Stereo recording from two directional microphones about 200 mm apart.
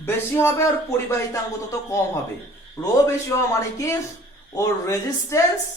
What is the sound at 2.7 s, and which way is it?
Speech, 15° left (ahead or behind).